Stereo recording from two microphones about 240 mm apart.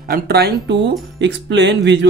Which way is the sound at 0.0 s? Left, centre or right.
Right.